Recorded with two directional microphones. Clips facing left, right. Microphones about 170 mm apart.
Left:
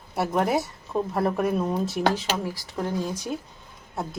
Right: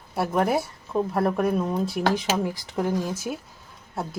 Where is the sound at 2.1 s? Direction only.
15° right (ahead or behind).